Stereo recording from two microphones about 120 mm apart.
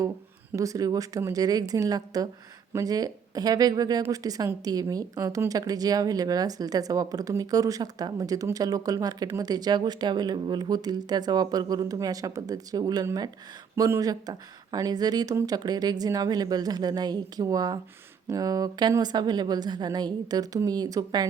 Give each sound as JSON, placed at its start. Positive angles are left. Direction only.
{"t": 0.5, "sound": "a woman's voice", "side_deg": -30}